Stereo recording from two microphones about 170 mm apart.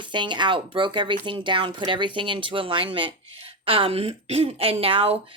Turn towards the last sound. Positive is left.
turn(degrees=-35)  # may be behind; listen again after turning